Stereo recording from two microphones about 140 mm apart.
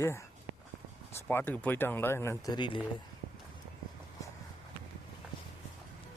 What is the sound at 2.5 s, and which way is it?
Speech, 35° left (ahead or behind).